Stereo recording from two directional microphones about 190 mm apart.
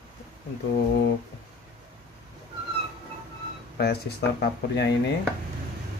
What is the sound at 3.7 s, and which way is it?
Speech, 60° left (ahead or behind).